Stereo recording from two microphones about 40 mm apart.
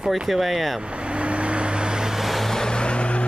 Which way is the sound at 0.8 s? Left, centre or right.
Right.